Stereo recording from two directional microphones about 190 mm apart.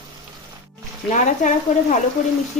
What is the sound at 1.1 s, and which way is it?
Speech, 40° left (ahead or behind).